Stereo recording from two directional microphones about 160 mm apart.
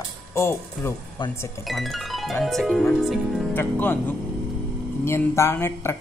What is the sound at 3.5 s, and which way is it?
Speech, 15° left (ahead or behind).